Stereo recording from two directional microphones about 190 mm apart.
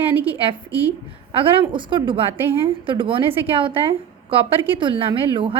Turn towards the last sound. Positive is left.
turn(degrees=-25)  # may be behind; listen again after turning